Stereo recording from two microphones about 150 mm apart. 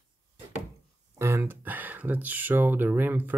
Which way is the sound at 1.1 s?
20° right (ahead or behind).